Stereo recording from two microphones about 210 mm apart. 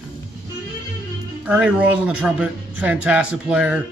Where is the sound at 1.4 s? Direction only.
5° right (ahead or behind).